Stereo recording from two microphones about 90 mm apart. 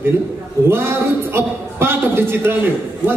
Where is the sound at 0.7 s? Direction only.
25° right (ahead or behind).